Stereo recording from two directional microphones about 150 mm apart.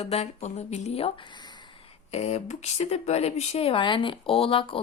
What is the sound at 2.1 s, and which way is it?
Speech, 45° left (ahead or behind).